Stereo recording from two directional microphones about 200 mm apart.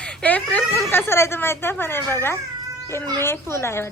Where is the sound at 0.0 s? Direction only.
5° left (ahead or behind).